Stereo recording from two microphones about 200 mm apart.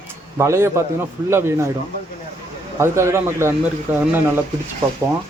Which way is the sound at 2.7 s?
15° right (ahead or behind).